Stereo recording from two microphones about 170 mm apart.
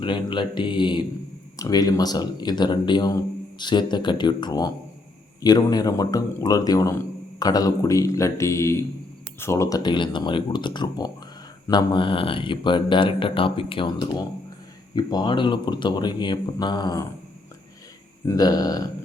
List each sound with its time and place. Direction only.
0.0 s speech: 30° left (ahead or behind)
18.3 s speech: 20° left (ahead or behind)